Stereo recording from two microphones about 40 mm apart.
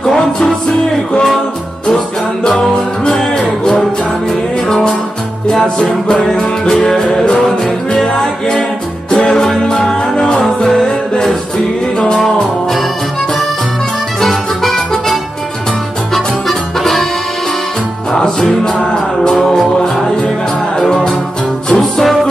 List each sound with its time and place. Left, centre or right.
0.0 s music: centre
3.2 s music: centre
5.8 s music: centre
14.2 s music: centre
16.4 s music: centre
18.1 s music: centre
20.8 s music: centre
21.7 s music: centre